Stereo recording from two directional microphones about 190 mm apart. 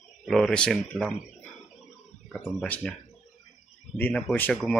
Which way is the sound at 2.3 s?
5° left (ahead or behind).